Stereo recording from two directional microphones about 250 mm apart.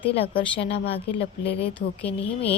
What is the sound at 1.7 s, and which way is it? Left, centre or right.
Speech, centre.